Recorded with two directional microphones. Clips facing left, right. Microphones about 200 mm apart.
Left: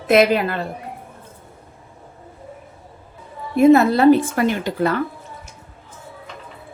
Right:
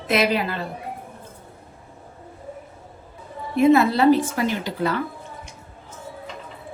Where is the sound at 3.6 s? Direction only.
45° left (ahead or behind).